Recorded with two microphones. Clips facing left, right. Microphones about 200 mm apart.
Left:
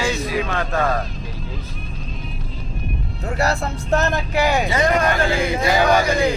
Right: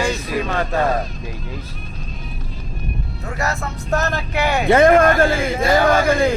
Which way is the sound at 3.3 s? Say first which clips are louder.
Left 3 dB; 30° left (ahead or behind).